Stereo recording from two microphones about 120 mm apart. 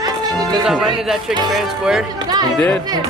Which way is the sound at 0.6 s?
5° right (ahead or behind).